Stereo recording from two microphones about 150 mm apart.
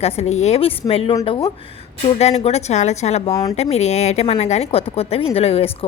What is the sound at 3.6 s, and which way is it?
A woman's voice, 45° left (ahead or behind).